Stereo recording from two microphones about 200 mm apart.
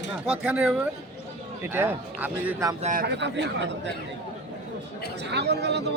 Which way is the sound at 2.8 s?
45° right (ahead or behind).